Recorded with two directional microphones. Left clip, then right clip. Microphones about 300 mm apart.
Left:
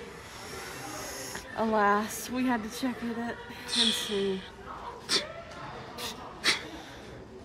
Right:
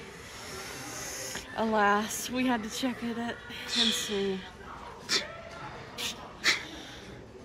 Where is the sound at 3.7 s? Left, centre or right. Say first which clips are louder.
Left 1 dB; centre.